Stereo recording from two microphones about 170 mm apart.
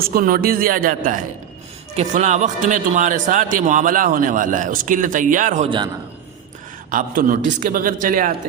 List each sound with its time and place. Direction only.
0.0 s speech: 55° right (ahead or behind)
2.0 s a man's voice: 45° right (ahead or behind)
5.6 s a man's voice: 30° right (ahead or behind)
6.9 s a man's voice: 55° right (ahead or behind)